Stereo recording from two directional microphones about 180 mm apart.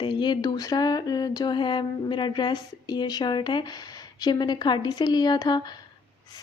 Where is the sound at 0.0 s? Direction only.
25° left (ahead or behind).